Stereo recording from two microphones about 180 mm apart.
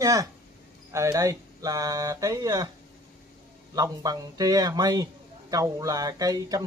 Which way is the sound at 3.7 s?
20° right (ahead or behind).